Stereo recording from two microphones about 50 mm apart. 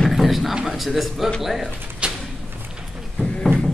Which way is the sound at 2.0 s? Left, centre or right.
Right.